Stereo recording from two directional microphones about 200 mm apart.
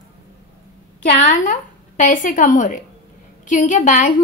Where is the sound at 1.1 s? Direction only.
40° left (ahead or behind).